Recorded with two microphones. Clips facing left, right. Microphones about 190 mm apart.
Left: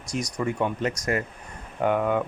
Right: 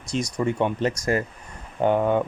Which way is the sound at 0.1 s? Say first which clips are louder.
Right 3 dB; 25° right (ahead or behind).